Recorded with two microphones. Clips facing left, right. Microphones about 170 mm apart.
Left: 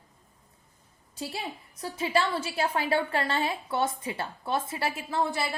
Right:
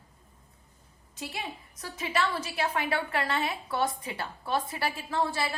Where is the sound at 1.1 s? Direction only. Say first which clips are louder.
Left 2 dB; 30° left (ahead or behind).